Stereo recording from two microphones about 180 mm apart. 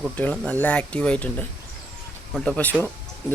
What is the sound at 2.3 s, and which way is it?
Speech, 5° left (ahead or behind).